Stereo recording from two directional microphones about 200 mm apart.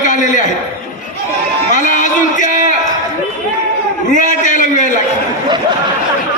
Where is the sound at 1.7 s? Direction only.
40° left (ahead or behind).